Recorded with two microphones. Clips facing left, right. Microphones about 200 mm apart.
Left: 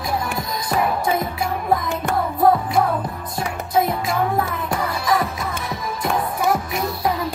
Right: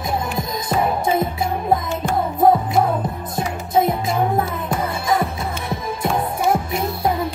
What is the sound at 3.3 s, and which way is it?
Music, 25° right (ahead or behind).